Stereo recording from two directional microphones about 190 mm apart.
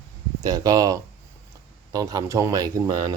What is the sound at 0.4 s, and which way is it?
Speech, 20° right (ahead or behind).